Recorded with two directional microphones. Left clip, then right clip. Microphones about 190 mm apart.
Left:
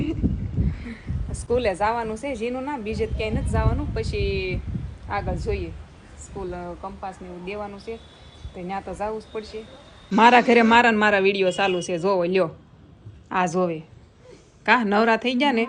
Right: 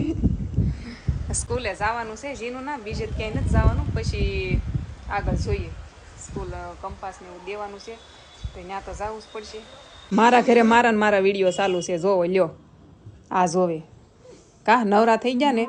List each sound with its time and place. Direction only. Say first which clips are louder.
0.7 s a sound: left 1 dB; centre (ahead or behind)
1.5 s a woman's voice: left 4 dB; centre (ahead or behind)
13.2 s a man's voice: right 2 dB; 20° right (ahead or behind)